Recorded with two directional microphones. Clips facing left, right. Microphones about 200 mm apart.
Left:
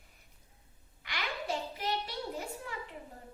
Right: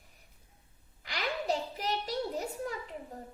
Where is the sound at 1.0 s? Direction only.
40° right (ahead or behind).